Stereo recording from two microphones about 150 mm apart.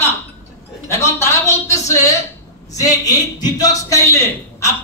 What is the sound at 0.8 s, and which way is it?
Speech, 20° left (ahead or behind).